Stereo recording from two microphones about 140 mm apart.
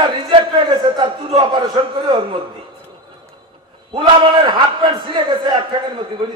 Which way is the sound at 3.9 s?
35° right (ahead or behind).